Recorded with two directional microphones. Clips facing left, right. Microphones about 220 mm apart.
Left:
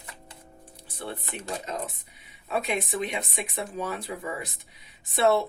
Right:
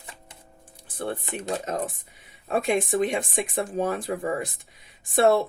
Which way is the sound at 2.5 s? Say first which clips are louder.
Right 5 dB; 50° right (ahead or behind).